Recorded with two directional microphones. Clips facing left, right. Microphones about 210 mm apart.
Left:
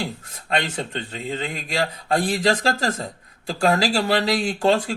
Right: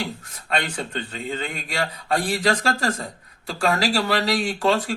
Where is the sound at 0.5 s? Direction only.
20° left (ahead or behind).